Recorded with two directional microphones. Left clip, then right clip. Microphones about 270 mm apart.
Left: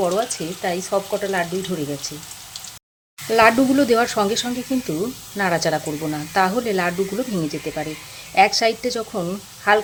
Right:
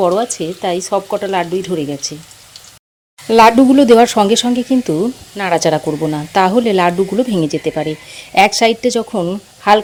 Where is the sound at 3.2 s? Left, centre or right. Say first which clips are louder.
Right 7 dB; right.